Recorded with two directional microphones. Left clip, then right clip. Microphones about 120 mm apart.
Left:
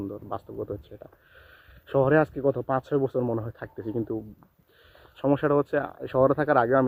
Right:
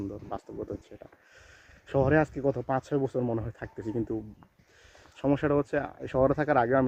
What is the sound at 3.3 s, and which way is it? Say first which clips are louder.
Speech: left 2 dB; 15° right (ahead or behind).